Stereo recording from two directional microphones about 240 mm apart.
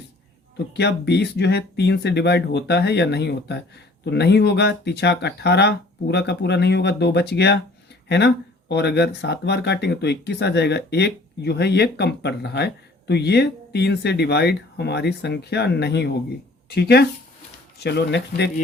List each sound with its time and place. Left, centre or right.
0.5 s speech: left